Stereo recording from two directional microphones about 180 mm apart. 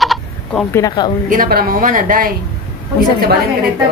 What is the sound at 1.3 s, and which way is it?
Speech, 55° right (ahead or behind).